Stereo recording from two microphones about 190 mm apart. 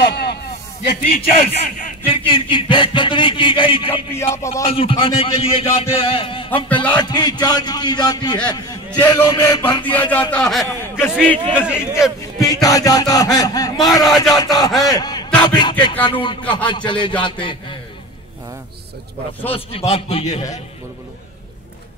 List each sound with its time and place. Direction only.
0.1 s snake: 60° left (ahead or behind)
1.0 s a man's voice: 50° left (ahead or behind)
2.0 s speech: 25° left (ahead or behind)
4.1 s a man's voice: 15° left (ahead or behind)
4.6 s speech: 30° left (ahead or behind)
6.7 s a man's voice: 5° left (ahead or behind)
7.0 s speech: 20° left (ahead or behind)
8.5 s a sound: 20° left (ahead or behind)
9.1 s speech: 25° left (ahead or behind)
9.8 s a man's voice: 10° left (ahead or behind)
11.6 s speech: 5° right (ahead or behind)
12.2 s a man's voice: 15° left (ahead or behind)
19.9 s a man's voice: 30° left (ahead or behind)